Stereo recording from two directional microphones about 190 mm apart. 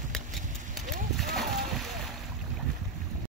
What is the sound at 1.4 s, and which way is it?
Splash, centre (ahead or behind).